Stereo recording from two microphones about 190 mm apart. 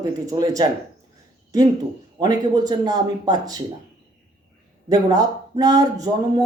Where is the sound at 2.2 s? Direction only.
20° right (ahead or behind).